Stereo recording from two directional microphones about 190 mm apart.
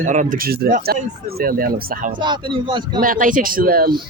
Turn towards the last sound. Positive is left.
turn(degrees=-50)  # may be behind; listen again after turning